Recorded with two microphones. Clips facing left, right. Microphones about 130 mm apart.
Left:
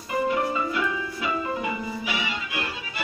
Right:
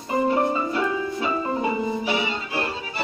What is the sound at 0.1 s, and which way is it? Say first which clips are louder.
Music: right 3 dB; 30° right (ahead or behind).